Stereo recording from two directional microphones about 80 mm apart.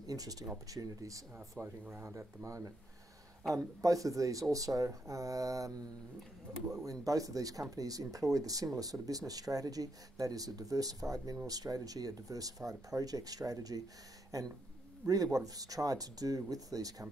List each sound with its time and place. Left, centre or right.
0.0 s speech: right
1.6 s speech: right
6.8 s speech: right